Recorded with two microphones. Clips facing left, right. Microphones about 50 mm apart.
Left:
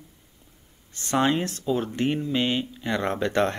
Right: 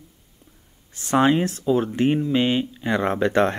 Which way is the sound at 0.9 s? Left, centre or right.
Centre.